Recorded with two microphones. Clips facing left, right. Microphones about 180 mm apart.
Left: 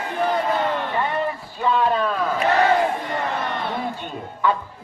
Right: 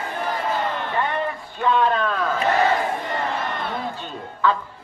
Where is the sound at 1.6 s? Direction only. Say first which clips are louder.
Even; 5° left (ahead or behind).